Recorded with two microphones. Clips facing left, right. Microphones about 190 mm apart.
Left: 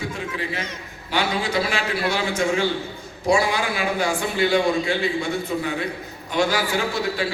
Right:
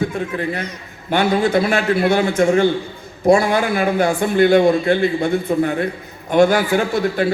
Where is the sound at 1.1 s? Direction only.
55° right (ahead or behind).